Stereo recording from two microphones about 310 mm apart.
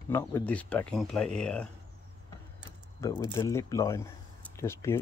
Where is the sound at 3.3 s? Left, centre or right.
Centre.